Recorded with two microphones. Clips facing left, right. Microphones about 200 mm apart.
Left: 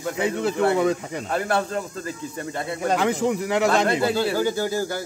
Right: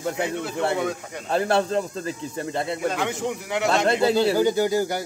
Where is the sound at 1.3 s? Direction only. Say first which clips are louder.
Right 3 dB; 25° right (ahead or behind).